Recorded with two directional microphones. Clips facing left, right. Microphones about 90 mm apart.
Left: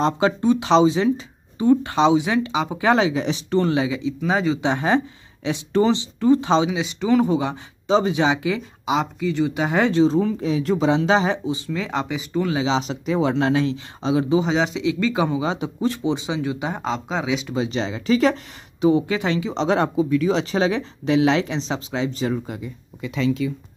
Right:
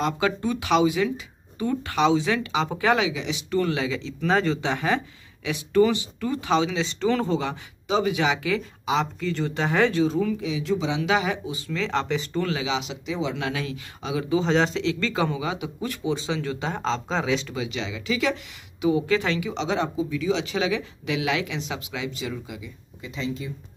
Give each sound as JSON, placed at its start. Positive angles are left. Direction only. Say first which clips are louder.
{"t": 0.0, "sound": "speech", "louder": "left 5 dB", "side_deg": 25}
{"t": 2.9, "sound": "speech", "louder": "left 7 dB", "side_deg": 40}
{"t": 4.6, "sound": "speech", "louder": "left 5 dB", "side_deg": 25}
{"t": 6.7, "sound": "speech", "louder": "left 4 dB", "side_deg": 10}
{"t": 7.9, "sound": "speech", "louder": "left 4 dB", "side_deg": 25}
{"t": 9.2, "sound": "speech", "louder": "left 5 dB", "side_deg": 5}
{"t": 11.0, "sound": "speech", "louder": "left 5 dB", "side_deg": 30}
{"t": 12.5, "sound": "speech", "louder": "left 6 dB", "side_deg": 35}
{"t": 14.4, "sound": "speech", "louder": "left 1 dB", "side_deg": 5}
{"t": 17.6, "sound": "speech", "louder": "left 6 dB", "side_deg": 35}
{"t": 19.0, "sound": "speech", "louder": "left 1 dB", "side_deg": 20}
{"t": 19.5, "sound": "speech", "louder": "left 6 dB", "side_deg": 45}
{"t": 22.3, "sound": "speech", "louder": "left 8 dB", "side_deg": 50}
{"t": 23.0, "sound": "speech", "louder": "left 9 dB", "side_deg": 80}